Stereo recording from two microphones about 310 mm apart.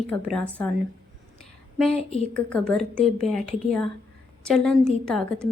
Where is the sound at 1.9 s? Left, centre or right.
Centre.